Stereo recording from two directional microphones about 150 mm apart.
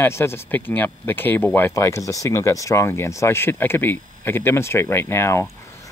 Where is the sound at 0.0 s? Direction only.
15° left (ahead or behind).